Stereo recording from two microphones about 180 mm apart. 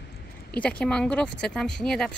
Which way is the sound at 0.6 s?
5° left (ahead or behind).